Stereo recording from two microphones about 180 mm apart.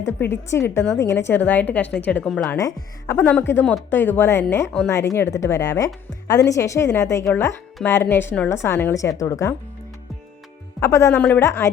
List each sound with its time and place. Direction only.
0.0 s a woman's voice: 15° left (ahead or behind)
10.8 s a woman's voice: 15° left (ahead or behind)